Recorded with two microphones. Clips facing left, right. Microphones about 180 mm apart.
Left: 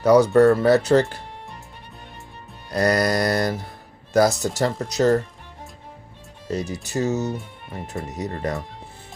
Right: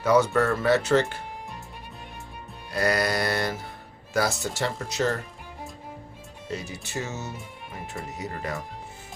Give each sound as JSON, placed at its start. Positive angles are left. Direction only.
{"t": 0.0, "sound": "speech", "side_deg": 35}
{"t": 2.6, "sound": "speech", "side_deg": 40}
{"t": 6.5, "sound": "speech", "side_deg": 40}